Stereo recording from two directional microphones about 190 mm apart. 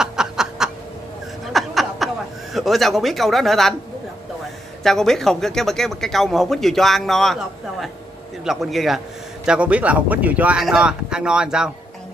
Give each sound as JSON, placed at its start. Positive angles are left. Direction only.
{"t": 0.0, "sound": "snicker", "side_deg": -5}
{"t": 1.4, "sound": "a sound", "side_deg": 0}
{"t": 2.5, "sound": "speech", "side_deg": 0}
{"t": 4.8, "sound": "speech", "side_deg": 0}